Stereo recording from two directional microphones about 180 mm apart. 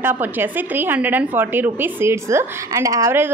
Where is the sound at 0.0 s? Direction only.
10° right (ahead or behind).